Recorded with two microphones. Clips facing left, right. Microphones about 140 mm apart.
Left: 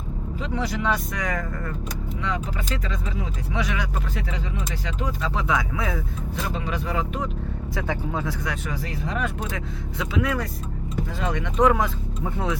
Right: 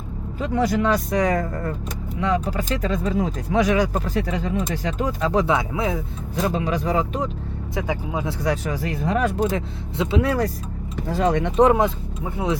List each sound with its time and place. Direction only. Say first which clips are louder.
0.4 s speech: right 6 dB; 45° right (ahead or behind)
5.5 s speech: right 3 dB; 25° right (ahead or behind)
6.3 s speech: right 7 dB; 40° right (ahead or behind)
7.8 s speech: right 2 dB; 15° right (ahead or behind)
8.3 s speech: right 6 dB; 35° right (ahead or behind)